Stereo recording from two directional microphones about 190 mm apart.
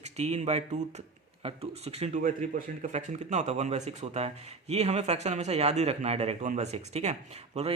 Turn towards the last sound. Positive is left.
turn(degrees=-35)  # may be behind; listen again after turning